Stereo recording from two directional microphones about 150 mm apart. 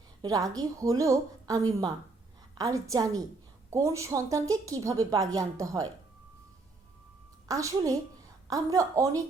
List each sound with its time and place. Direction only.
0.2 s a woman's voice: 25° right (ahead or behind)
7.4 s a woman's voice: 20° right (ahead or behind)